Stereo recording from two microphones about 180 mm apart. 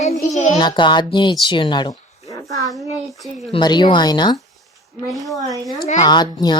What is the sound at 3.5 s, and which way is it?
Speech, 25° left (ahead or behind).